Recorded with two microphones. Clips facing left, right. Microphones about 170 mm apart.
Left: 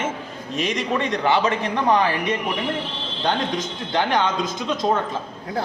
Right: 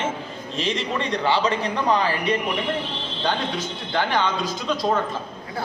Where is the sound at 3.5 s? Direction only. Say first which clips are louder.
Left 2 dB; 15° left (ahead or behind).